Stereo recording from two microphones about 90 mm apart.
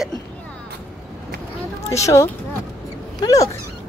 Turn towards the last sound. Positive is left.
turn(degrees=40)  # may be behind; listen again after turning